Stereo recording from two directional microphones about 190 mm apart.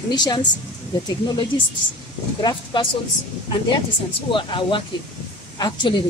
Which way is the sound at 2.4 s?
25° left (ahead or behind).